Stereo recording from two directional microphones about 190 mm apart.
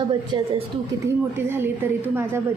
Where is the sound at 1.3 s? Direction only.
10° right (ahead or behind).